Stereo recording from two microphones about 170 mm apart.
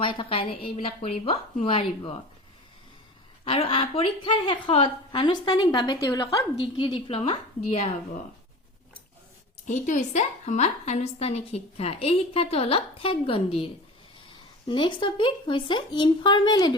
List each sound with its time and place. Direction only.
0.0 s a woman's voice: 30° left (ahead or behind)
3.4 s a woman's voice: 35° left (ahead or behind)
6.8 s a woman's voice: 35° left (ahead or behind)
9.6 s a woman's voice: 50° left (ahead or behind)
14.7 s a woman's voice: 30° left (ahead or behind)